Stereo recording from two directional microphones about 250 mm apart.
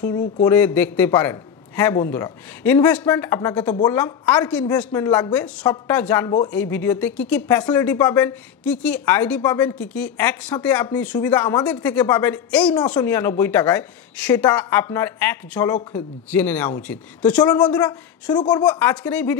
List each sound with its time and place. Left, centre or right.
0.0 s speech: centre
17.6 s speech: centre